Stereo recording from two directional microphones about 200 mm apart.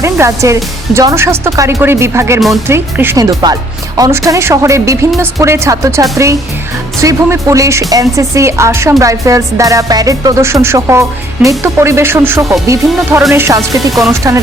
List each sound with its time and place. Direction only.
0.0 s speech: 15° right (ahead or behind)
13.7 s speech: centre (ahead or behind)